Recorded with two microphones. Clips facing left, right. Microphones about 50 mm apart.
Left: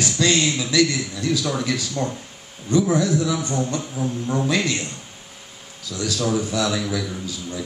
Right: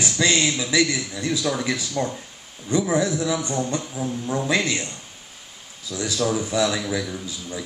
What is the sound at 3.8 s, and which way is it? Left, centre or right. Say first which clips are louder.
Music: left 2 dB; centre.